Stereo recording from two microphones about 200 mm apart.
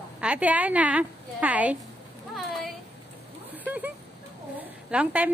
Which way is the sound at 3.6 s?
10° right (ahead or behind).